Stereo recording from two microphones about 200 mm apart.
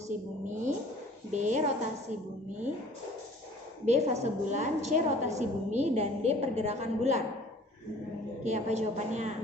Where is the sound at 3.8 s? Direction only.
35° right (ahead or behind).